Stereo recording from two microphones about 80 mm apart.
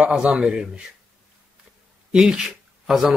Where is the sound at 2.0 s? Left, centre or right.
Centre.